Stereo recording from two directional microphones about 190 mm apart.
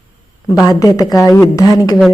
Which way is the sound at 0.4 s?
20° left (ahead or behind).